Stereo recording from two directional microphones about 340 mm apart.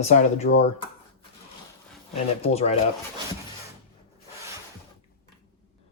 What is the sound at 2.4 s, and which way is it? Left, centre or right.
Speech, centre.